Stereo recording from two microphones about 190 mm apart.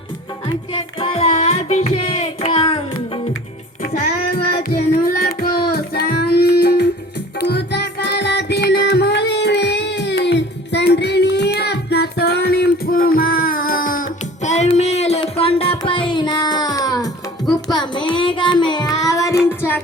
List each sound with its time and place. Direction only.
0.4 s music: 25° left (ahead or behind)
3.9 s child singing: 50° left (ahead or behind)
7.3 s music: 60° left (ahead or behind); by 17.1 s 20° left (ahead or behind)
17.7 s child singing: 25° left (ahead or behind)